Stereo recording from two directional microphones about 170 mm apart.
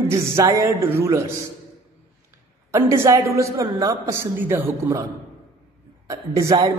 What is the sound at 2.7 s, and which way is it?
Mantra, 15° right (ahead or behind).